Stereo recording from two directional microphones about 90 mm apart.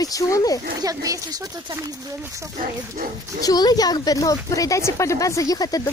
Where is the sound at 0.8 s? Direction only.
40° right (ahead or behind).